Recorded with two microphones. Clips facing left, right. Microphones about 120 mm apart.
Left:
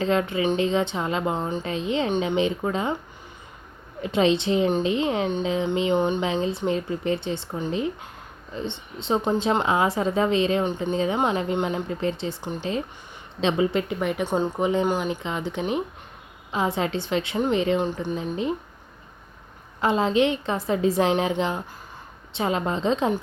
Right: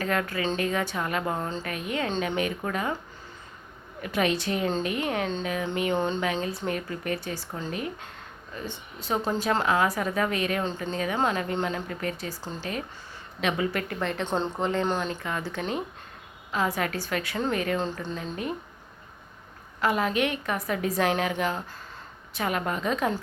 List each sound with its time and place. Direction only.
0.0 s speech: 20° left (ahead or behind)
4.0 s speech: 25° left (ahead or behind)
19.8 s speech: 25° left (ahead or behind)